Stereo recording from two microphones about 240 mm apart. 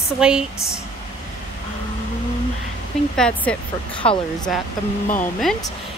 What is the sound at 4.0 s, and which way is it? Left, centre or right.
Speech, left.